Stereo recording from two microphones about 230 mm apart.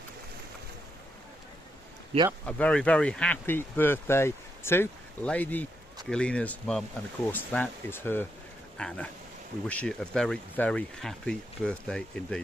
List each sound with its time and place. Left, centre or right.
2.1 s speech: right
2.5 s speech: centre